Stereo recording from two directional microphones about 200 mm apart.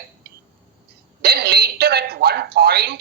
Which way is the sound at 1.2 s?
50° right (ahead or behind).